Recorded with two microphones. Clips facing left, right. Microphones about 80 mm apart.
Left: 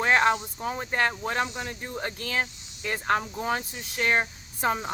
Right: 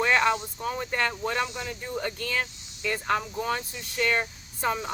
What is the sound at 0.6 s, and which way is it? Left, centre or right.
Speech, centre.